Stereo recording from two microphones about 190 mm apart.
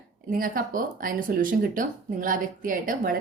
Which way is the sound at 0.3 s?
50° right (ahead or behind).